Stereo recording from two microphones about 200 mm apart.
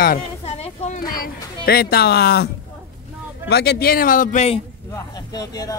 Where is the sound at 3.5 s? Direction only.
50° left (ahead or behind); by 4.6 s 35° left (ahead or behind).